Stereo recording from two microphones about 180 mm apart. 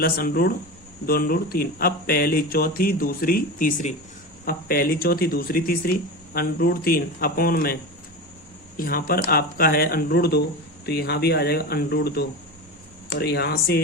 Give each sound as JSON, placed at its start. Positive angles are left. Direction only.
{"t": 0.0, "sound": "speech", "side_deg": 55}
{"t": 8.8, "sound": "speech", "side_deg": 55}